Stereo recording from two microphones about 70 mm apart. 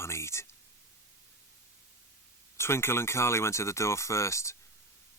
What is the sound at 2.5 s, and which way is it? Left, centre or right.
Speech, left.